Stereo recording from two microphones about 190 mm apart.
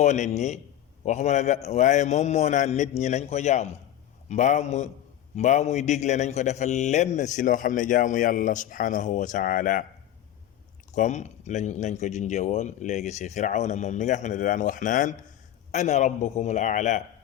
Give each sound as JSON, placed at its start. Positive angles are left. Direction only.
{"t": 0.0, "sound": "a man's voice", "side_deg": 35}
{"t": 10.9, "sound": "a man's voice", "side_deg": 40}